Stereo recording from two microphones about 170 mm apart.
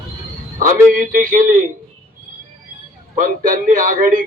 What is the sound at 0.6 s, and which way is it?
A man's voice, 50° right (ahead or behind).